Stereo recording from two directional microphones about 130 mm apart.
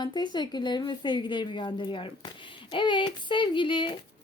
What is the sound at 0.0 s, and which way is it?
A woman's voice, 35° left (ahead or behind).